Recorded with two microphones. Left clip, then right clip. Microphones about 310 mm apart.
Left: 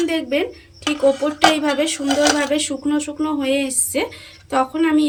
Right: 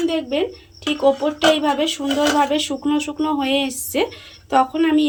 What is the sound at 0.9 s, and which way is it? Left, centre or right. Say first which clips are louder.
Speech: even; centre.